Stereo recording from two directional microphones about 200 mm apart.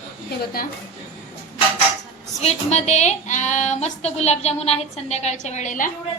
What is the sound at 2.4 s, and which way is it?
A woman's voice, 30° left (ahead or behind).